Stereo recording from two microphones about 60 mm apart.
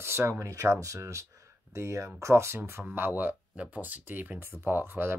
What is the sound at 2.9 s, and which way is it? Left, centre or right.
Speech, right.